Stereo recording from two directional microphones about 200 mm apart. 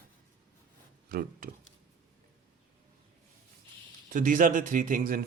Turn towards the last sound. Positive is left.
turn(degrees=-45)  # may be behind; listen again after turning